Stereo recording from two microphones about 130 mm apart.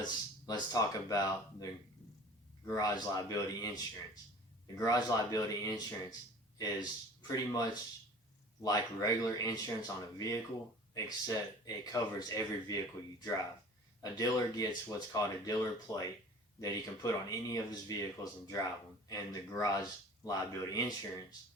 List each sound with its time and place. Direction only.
0.0 s speech: 30° left (ahead or behind)
2.6 s speech: 30° left (ahead or behind)